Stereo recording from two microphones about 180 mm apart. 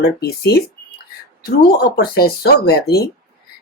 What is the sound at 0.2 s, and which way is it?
Speech, 60° left (ahead or behind).